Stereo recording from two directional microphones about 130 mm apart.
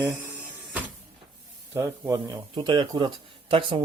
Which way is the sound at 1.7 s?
25° right (ahead or behind).